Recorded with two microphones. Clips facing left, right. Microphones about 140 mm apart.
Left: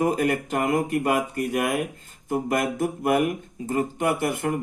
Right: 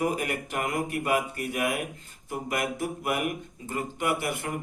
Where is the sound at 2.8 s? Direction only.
45° left (ahead or behind).